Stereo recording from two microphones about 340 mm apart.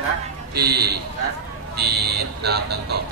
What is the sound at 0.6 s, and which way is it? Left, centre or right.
Speech, right.